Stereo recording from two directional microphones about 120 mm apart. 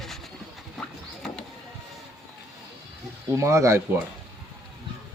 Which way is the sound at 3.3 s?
25° right (ahead or behind).